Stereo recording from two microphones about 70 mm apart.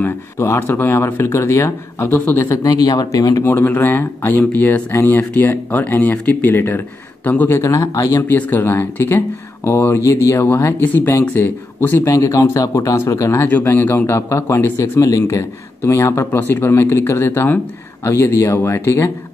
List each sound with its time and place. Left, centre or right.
0.0 s speech: left
2.6 s speech: left
3.4 s speech: left
7.5 s speech: left
8.3 s speech: left
12.0 s speech: left
13.1 s speech: left
13.5 s speech: left
15.3 s speech: left
18.0 s speech: left